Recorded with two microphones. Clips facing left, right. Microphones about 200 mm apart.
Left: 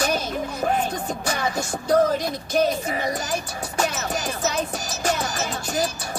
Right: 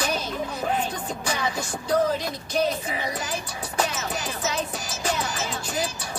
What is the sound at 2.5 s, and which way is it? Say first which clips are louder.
Music: left 3 dB; 45° left (ahead or behind).